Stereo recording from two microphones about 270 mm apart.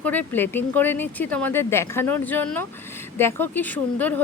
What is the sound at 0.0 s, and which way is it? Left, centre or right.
Speech, centre.